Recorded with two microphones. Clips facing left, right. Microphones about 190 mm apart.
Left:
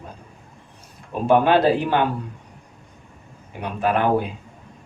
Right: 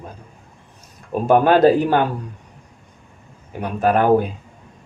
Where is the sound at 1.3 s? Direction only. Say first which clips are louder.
Right 3 dB; 45° right (ahead or behind).